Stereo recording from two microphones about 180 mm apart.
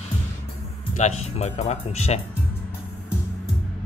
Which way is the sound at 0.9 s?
40° left (ahead or behind).